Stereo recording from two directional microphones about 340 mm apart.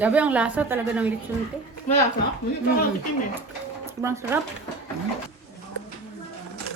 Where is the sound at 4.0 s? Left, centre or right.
Centre.